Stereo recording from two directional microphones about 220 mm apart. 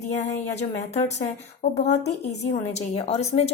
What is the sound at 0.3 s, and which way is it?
A woman's voice, 30° left (ahead or behind).